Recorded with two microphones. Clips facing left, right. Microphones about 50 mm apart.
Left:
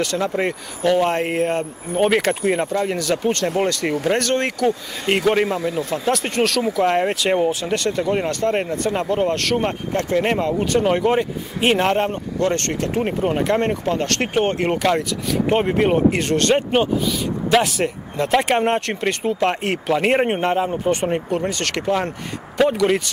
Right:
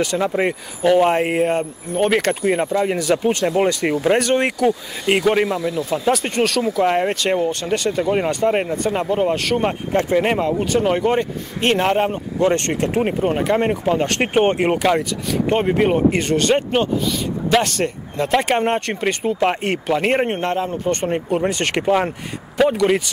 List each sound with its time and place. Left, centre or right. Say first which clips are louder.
0.0 s speech: right 2 dB; centre
5.0 s speech: right 1 dB; centre
12.4 s speech: right 4 dB; centre
13.2 s speech: left 1 dB; centre; by 14.7 s right
14.7 s speech: right 1 dB; centre
21.1 s speech: right 2 dB; centre
21.5 s speech: right 3 dB; right
22.6 s speech: right 1 dB; centre